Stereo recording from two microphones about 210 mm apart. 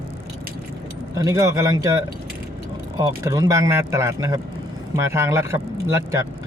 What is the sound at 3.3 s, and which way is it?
Speech, 15° right (ahead or behind).